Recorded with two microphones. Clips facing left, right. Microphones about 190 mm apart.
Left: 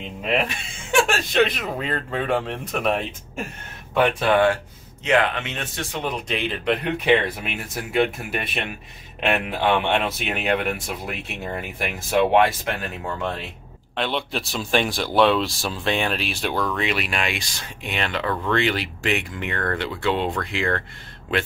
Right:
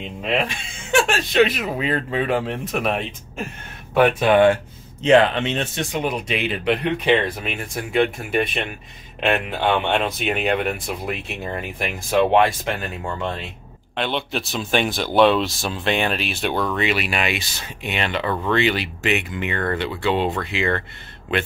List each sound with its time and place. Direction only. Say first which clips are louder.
1.3 s speech: right 4 dB; 5° right (ahead or behind)
5.0 s speech: right 6 dB; 30° right (ahead or behind)
5.9 s speech: right 2 dB; 10° right (ahead or behind)